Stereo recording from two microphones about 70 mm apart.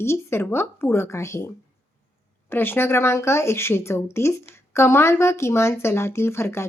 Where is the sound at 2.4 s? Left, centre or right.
Left.